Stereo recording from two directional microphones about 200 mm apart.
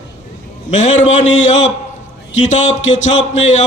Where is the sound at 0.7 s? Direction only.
35° left (ahead or behind).